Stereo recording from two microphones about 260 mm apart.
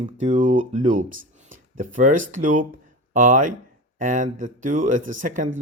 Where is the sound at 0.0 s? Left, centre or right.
Right.